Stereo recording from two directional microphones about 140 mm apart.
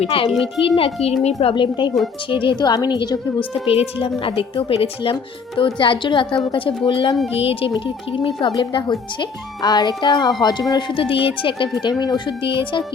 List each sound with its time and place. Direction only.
0.0 s a woman's voice: 45° left (ahead or behind)
0.3 s a child's voice: 5° right (ahead or behind)
0.8 s a woman's voice: 45° left (ahead or behind); by 3.2 s 30° left (ahead or behind)
3.5 s a woman's voice: 45° left (ahead or behind)